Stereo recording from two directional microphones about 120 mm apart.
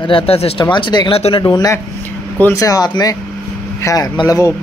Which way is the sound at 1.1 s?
50° left (ahead or behind).